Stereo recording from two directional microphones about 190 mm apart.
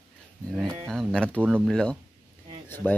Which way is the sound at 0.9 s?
Centre (ahead or behind).